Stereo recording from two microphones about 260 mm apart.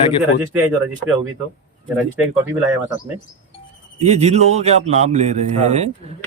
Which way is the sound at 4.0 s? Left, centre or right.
Right.